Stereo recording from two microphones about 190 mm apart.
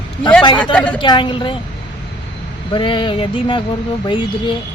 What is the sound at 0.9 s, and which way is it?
Speech, 25° left (ahead or behind).